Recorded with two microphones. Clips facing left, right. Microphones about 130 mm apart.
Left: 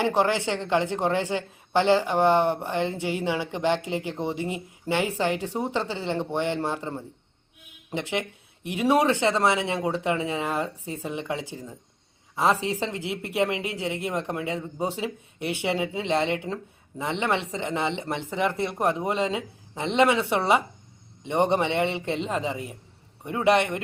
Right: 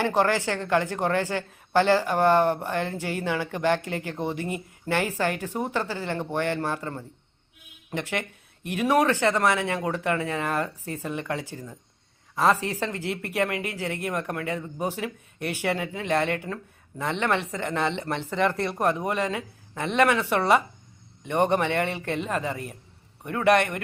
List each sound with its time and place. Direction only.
0.0 s a woman's voice: 15° left (ahead or behind)